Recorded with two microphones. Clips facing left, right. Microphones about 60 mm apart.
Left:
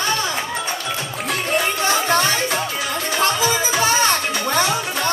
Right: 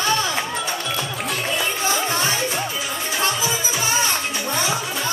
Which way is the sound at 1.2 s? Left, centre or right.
Left.